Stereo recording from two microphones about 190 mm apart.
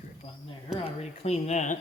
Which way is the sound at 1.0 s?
35° left (ahead or behind).